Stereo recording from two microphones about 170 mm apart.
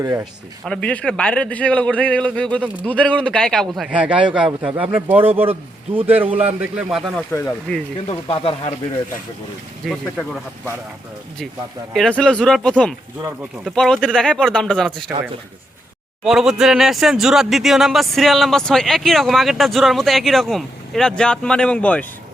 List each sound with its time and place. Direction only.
0.0 s speech: 15° right (ahead or behind)
0.6 s speech: 5° left (ahead or behind)
7.3 s speech: 15° left (ahead or behind)
8.3 s speech: 35° left (ahead or behind)
9.8 s speech: centre (ahead or behind)
11.9 s speech: 5° left (ahead or behind)
16.2 s speech: 5° right (ahead or behind)